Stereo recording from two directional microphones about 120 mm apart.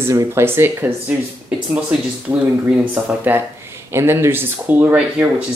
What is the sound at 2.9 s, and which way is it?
Speech, 15° right (ahead or behind).